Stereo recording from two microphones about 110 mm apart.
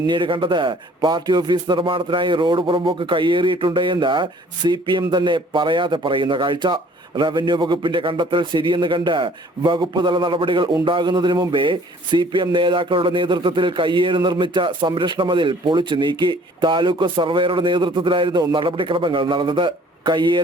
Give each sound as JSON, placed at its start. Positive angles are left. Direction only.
{"t": 0.0, "sound": "speech", "side_deg": -50}